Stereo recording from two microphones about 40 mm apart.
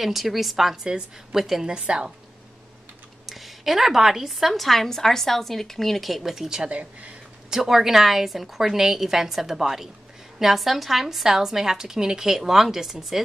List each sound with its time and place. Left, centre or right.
0.0 s a woman's voice: centre
1.7 s a woman's voice: right
3.3 s a woman's voice: centre
6.7 s speech: right
7.4 s a woman's voice: centre